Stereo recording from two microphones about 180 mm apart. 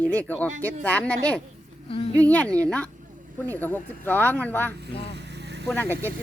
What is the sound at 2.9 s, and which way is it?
Vehicle, 45° right (ahead or behind).